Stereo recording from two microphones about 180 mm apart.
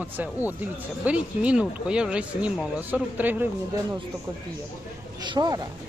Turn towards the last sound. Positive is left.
turn(degrees=-20)  # may be behind; listen again after turning